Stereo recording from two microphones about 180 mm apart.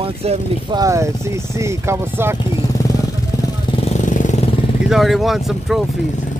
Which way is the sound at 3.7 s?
35° left (ahead or behind).